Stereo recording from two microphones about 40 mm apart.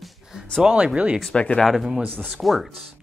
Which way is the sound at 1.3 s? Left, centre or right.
Left.